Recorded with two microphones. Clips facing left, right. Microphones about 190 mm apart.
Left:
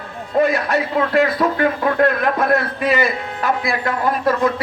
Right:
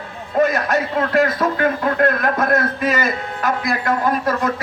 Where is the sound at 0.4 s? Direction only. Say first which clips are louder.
Even; 45° right (ahead or behind).